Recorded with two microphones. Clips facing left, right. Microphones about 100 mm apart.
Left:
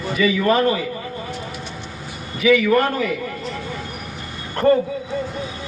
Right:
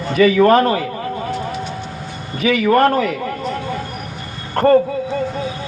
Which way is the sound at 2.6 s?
45° right (ahead or behind).